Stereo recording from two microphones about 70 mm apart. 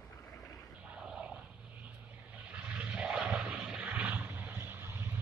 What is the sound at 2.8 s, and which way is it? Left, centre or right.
Vehicle, centre.